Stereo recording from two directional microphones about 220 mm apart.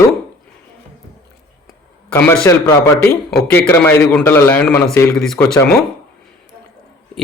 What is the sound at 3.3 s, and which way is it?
A man's voice, 5° left (ahead or behind).